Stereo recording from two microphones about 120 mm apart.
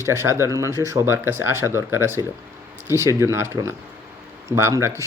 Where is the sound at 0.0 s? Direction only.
20° right (ahead or behind).